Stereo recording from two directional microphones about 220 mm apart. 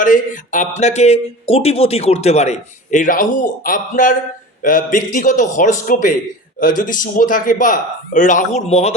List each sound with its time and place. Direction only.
0.0 s a man's voice: 35° left (ahead or behind)